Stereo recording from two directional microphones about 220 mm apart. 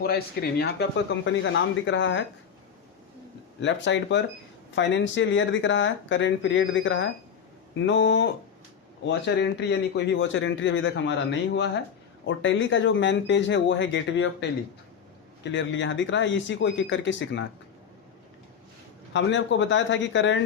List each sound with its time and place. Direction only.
0.0 s speech: 45° left (ahead or behind)
3.6 s speech: 55° left (ahead or behind)
15.5 s speech: 55° left (ahead or behind)
19.1 s speech: 55° left (ahead or behind)